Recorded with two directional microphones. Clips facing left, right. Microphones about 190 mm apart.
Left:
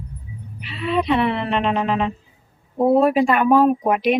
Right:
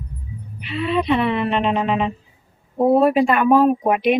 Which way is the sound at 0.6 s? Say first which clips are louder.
Right 1 dB; centre (ahead or behind).